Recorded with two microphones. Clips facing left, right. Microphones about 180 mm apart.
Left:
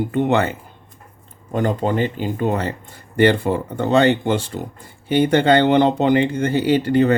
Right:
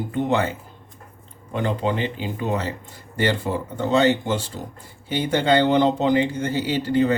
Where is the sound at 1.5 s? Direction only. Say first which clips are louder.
Left 4 dB; 45° left (ahead or behind).